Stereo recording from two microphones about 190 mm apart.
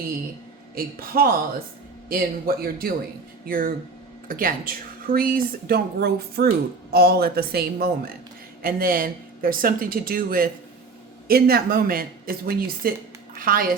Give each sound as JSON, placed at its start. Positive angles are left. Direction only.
{"t": 0.8, "sound": "speech", "side_deg": -50}